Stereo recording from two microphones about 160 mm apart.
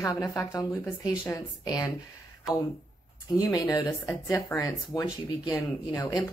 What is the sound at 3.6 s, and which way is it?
A woman's voice, 20° left (ahead or behind).